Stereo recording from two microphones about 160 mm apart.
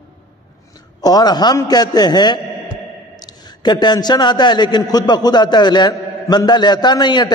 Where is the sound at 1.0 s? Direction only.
25° left (ahead or behind).